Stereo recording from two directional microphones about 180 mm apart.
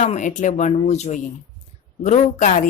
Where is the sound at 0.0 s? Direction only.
40° left (ahead or behind).